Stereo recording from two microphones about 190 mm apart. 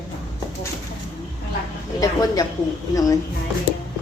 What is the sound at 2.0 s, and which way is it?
Speech, 20° left (ahead or behind).